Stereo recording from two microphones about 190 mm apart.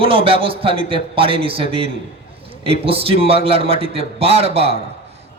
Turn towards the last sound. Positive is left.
turn(degrees=-30)  # may be behind; listen again after turning